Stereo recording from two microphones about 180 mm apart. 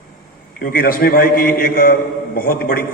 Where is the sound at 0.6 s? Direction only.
55° left (ahead or behind).